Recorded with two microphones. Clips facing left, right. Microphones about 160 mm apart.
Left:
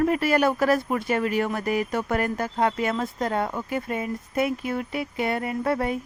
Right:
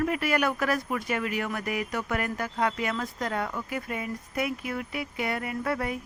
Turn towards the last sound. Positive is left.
turn(degrees=30)  # may be behind; listen again after turning